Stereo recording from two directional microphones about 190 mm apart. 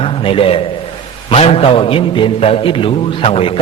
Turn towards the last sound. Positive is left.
turn(degrees=30)  # may be behind; listen again after turning